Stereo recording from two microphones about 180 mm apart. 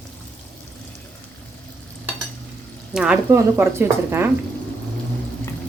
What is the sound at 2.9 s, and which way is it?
Speech, 5° right (ahead or behind).